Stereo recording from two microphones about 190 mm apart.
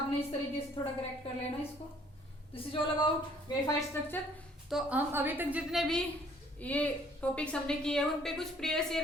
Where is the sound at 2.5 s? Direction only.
30° left (ahead or behind).